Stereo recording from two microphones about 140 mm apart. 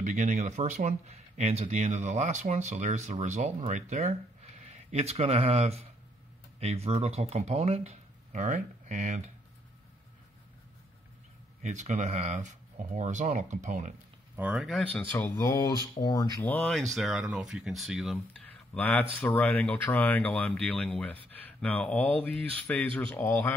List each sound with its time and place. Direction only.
0.0 s speech: 65° right (ahead or behind)
11.6 s speech: 60° right (ahead or behind)
14.3 s speech: 10° right (ahead or behind)
14.7 s speech: 5° left (ahead or behind); by 16.3 s 30° left (ahead or behind)
16.4 s speech: 5° left (ahead or behind)
16.9 s speech: 5° right (ahead or behind)
18.7 s speech: 10° left (ahead or behind)